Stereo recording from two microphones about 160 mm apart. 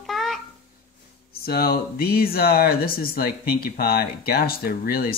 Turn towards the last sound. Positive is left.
turn(degrees=65)  # may be behind; listen again after turning